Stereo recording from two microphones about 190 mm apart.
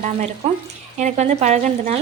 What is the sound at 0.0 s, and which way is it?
Speech, 40° right (ahead or behind).